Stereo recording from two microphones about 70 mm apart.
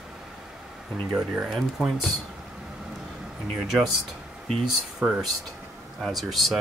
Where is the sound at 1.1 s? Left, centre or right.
Centre.